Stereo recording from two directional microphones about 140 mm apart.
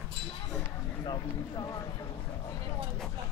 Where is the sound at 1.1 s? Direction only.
30° left (ahead or behind).